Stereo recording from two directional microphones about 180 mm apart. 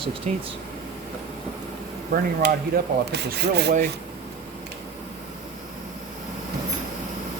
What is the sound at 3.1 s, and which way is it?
Rub, 65° right (ahead or behind).